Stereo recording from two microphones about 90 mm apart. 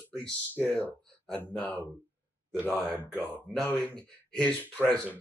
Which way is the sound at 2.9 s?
20° left (ahead or behind).